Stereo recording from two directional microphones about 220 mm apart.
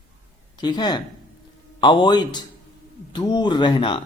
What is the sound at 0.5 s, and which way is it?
Speech, 20° left (ahead or behind).